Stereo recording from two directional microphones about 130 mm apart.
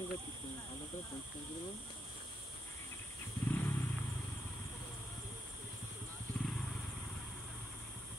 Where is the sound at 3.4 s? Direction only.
15° left (ahead or behind).